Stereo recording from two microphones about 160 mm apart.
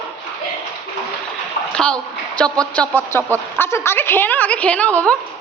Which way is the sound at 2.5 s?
5° left (ahead or behind).